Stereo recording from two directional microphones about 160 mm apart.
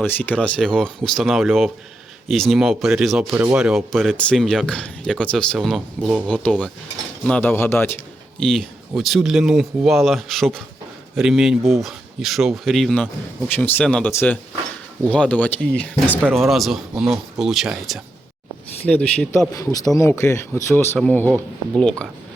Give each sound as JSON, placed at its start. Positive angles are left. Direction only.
{"t": 0.0, "sound": "speech", "side_deg": 10}
{"t": 8.4, "sound": "speech", "side_deg": 0}
{"t": 18.9, "sound": "speech", "side_deg": 10}
{"t": 19.5, "sound": "speech", "side_deg": 20}